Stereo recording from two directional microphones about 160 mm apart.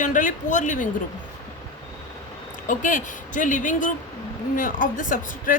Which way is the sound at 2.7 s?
55° left (ahead or behind).